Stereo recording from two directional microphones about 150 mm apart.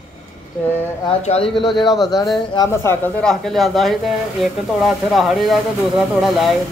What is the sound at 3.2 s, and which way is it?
Speech, centre (ahead or behind).